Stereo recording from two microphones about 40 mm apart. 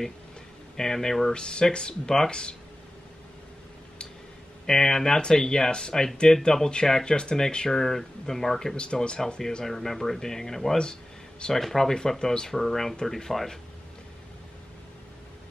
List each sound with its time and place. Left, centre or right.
0.7 s speech: centre
1.3 s speech: left
4.6 s speech: centre
8.7 s speech: left
9.7 s speech: centre
10.8 s a sound: centre
11.5 s speech: centre
11.9 s speech: centre